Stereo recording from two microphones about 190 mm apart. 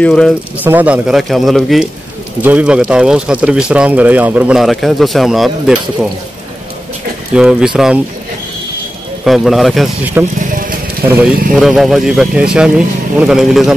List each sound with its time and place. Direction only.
0.0 s speech: 5° left (ahead or behind)
0.7 s speech: 10° right (ahead or behind)
7.3 s speech: 5° right (ahead or behind)
9.2 s speech: centre (ahead or behind)
10.5 s a sound: 45° right (ahead or behind)
11.1 s speech: 5° right (ahead or behind)